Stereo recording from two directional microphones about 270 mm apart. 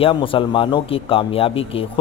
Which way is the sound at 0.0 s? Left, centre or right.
Centre.